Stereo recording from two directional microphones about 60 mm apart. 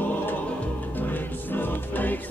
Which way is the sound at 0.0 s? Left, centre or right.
Left.